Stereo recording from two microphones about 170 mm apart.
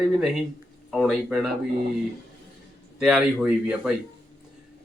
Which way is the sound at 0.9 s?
5° right (ahead or behind).